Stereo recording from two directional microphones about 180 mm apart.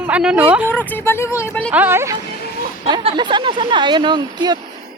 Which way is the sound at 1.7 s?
10° right (ahead or behind).